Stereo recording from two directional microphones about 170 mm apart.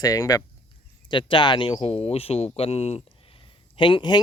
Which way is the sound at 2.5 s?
35° left (ahead or behind).